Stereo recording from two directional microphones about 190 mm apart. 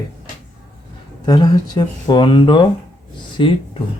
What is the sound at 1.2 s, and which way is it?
Speech, 20° left (ahead or behind).